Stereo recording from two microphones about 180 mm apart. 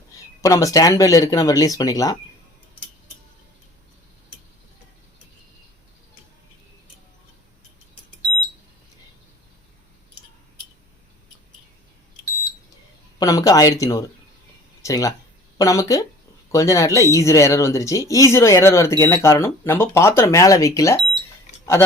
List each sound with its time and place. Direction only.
0.4 s speech: 20° left (ahead or behind)
13.1 s speech: 20° left (ahead or behind)